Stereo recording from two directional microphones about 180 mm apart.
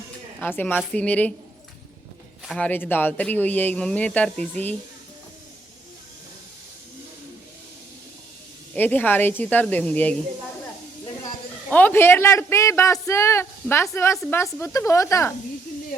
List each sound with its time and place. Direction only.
0.3 s a woman's voice: 10° left (ahead or behind)
2.4 s speech: 5° left (ahead or behind)
8.7 s speech: 10° left (ahead or behind)
11.7 s speech: 10° left (ahead or behind)